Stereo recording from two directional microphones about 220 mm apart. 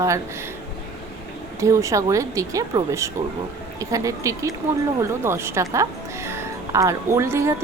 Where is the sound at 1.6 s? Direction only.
15° right (ahead or behind).